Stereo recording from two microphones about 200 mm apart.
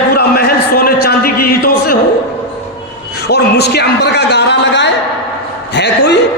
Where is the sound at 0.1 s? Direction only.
50° left (ahead or behind).